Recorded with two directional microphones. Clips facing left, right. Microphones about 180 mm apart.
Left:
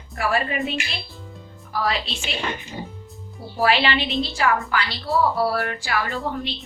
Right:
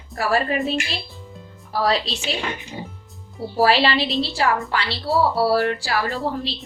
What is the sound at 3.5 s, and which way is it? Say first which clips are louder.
A woman's voice: right 3 dB; 35° right (ahead or behind).